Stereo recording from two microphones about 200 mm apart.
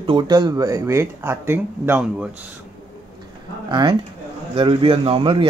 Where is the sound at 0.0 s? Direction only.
25° right (ahead or behind); by 2.2 s 5° right (ahead or behind).